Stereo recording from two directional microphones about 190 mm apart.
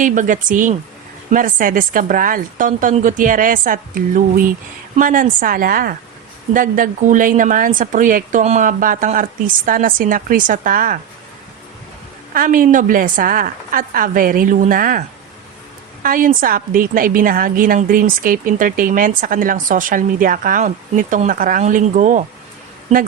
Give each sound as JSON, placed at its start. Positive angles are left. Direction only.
{"t": 0.0, "sound": "a woman's voice", "side_deg": -45}
{"t": 12.3, "sound": "a woman's voice", "side_deg": -45}
{"t": 16.0, "sound": "a woman's voice", "side_deg": -45}